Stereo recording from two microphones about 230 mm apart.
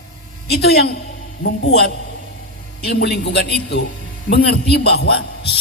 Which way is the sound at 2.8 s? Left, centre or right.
Left.